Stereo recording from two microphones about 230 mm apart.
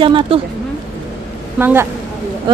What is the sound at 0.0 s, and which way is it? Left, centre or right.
Speech, right.